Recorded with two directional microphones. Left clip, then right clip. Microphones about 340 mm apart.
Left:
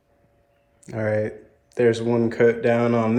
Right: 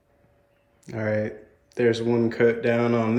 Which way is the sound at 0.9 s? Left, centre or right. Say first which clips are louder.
Left 3 dB; centre.